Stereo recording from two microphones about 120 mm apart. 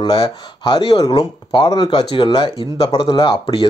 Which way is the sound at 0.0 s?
45° left (ahead or behind).